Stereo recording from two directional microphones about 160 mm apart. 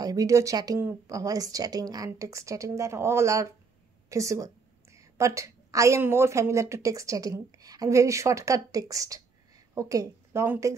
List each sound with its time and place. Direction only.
0.0 s a woman's voice: 25° right (ahead or behind)